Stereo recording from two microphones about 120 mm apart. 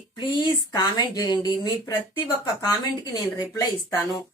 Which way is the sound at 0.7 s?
35° left (ahead or behind).